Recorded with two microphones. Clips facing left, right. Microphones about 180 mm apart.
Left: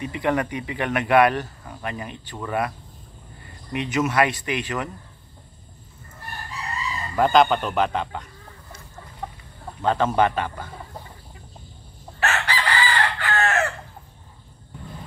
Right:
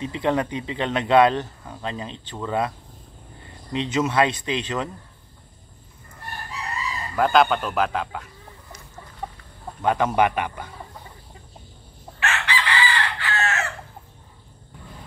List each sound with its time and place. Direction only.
0.0 s speech: 20° right (ahead or behind)
3.7 s speech: 20° right (ahead or behind)
7.2 s speech: centre (ahead or behind)
9.2 s chicken: 10° right (ahead or behind)
9.8 s a man's voice: 10° right (ahead or behind)
12.2 s chicken: 40° left (ahead or behind)
12.7 s chicken: 50° left (ahead or behind)